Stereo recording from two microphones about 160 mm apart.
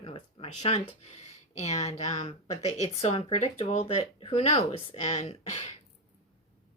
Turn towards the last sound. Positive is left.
turn(degrees=40)  # may be behind; listen again after turning